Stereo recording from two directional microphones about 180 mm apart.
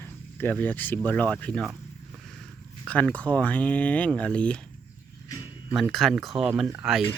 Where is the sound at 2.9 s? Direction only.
10° left (ahead or behind).